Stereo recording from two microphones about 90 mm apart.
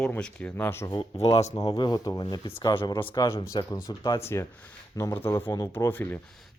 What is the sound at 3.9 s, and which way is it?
Speech, 55° left (ahead or behind).